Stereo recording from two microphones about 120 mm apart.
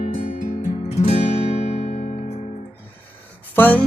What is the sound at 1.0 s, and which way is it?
Guitar, 65° left (ahead or behind).